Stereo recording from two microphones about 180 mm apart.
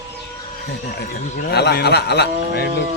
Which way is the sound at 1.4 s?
65° left (ahead or behind).